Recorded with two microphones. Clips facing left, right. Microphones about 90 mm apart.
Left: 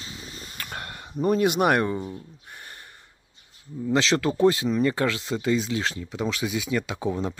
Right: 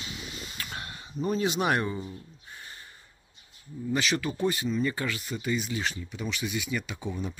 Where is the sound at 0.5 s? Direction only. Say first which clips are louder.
Left 6 dB; 50° left (ahead or behind).